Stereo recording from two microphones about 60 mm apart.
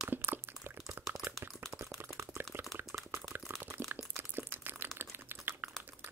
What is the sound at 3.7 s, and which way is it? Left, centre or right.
Crunch, right.